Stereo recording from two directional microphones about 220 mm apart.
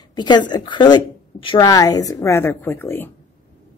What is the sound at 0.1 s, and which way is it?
A woman's voice, 20° left (ahead or behind).